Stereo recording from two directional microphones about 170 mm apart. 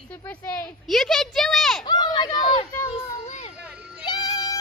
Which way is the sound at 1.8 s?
25° left (ahead or behind).